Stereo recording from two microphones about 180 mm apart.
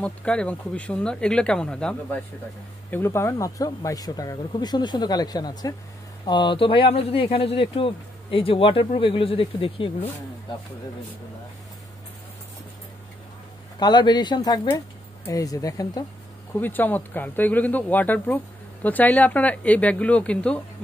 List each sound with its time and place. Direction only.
0.0 s speech: 5° left (ahead or behind); by 9.9 s 30° left (ahead or behind)
13.7 s speech: 25° left (ahead or behind); by 20.6 s 5° left (ahead or behind)